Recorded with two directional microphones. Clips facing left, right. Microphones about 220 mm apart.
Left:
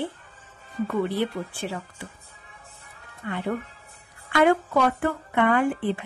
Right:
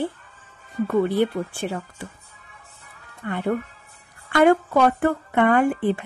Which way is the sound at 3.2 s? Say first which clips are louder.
Right 4 dB; 50° right (ahead or behind).